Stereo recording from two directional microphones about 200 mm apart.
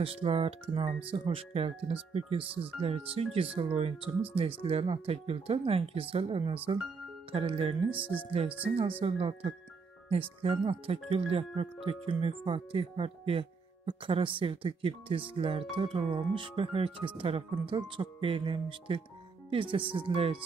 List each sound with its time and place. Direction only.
0.0 s speech: 30° right (ahead or behind)
9.0 s speech: 25° right (ahead or behind)